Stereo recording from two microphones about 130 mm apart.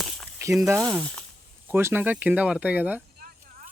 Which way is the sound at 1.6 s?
15° right (ahead or behind).